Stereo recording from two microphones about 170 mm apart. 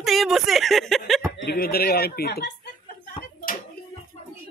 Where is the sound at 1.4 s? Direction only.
65° left (ahead or behind).